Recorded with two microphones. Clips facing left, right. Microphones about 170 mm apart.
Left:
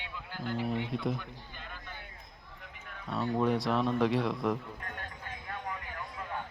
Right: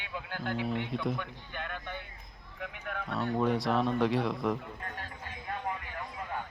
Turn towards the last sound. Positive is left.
turn(degrees=0)  # may be behind; listen again after turning